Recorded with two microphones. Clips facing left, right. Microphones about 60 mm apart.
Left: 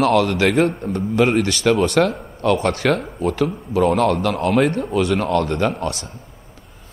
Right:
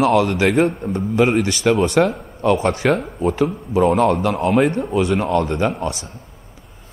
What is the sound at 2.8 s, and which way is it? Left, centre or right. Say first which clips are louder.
Speech: right 1 dB; centre.